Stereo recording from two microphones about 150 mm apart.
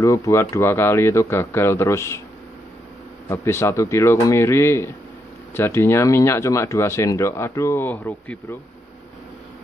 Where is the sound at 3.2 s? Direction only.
15° left (ahead or behind).